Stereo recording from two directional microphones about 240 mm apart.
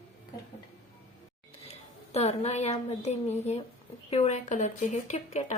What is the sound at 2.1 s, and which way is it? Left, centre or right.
Speech, left.